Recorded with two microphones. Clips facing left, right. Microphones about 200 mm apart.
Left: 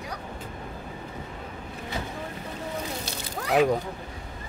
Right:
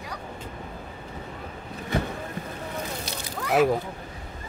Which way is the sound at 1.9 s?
60° right (ahead or behind).